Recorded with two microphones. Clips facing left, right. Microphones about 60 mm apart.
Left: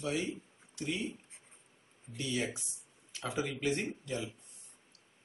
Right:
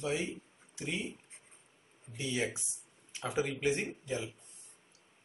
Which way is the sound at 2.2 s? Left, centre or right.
Right.